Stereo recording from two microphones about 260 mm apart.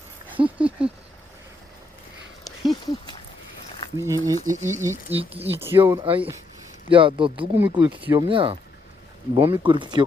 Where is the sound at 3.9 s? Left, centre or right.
Centre.